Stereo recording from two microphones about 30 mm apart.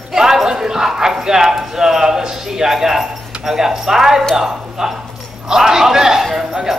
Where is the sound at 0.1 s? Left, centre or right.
Centre.